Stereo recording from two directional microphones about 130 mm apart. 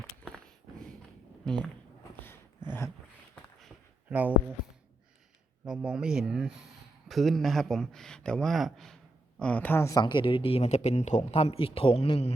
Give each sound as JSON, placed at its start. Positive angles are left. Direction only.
{"t": 1.5, "sound": "speech", "side_deg": 5}
{"t": 2.6, "sound": "a sound", "side_deg": 15}
{"t": 4.1, "sound": "speech", "side_deg": -10}
{"t": 5.6, "sound": "speech", "side_deg": -5}
{"t": 9.8, "sound": "a man's voice", "side_deg": 30}